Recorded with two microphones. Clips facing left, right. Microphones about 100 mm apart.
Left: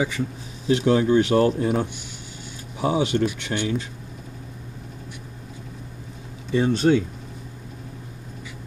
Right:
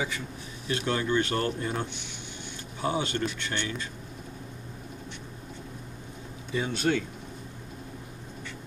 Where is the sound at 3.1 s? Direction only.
50° left (ahead or behind).